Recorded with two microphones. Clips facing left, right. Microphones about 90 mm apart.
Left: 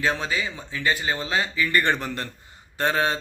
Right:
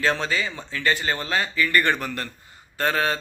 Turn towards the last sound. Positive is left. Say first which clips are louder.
# even
turn(degrees=20)  # may be behind; listen again after turning